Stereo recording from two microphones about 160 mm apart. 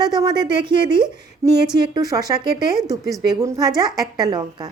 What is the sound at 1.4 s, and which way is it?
A woman's voice, 15° right (ahead or behind).